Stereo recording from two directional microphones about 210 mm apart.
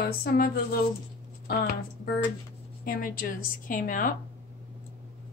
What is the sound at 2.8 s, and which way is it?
A woman's voice, 40° left (ahead or behind).